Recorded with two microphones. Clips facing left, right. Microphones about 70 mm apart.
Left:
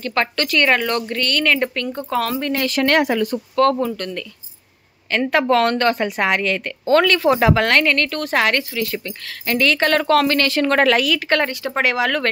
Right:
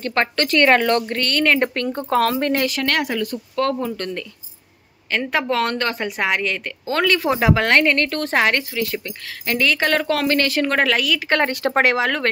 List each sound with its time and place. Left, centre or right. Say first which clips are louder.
0.0 s speech: even; right
2.8 s speech: left 5 dB; left
3.6 s speech: left 5 dB; centre
3.9 s speech: even; right
5.3 s speech: left 5 dB; centre; by 8.8 s right
9.0 s speech: left 1 dB; centre
11.5 s speech: right 2 dB; right